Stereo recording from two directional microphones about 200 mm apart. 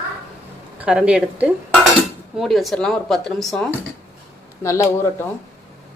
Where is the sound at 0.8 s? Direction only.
5° right (ahead or behind).